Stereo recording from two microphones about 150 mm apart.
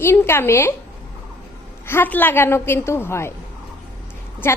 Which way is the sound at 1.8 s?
15° left (ahead or behind).